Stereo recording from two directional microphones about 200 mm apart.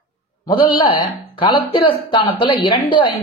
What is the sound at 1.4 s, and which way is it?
Speech, 25° left (ahead or behind).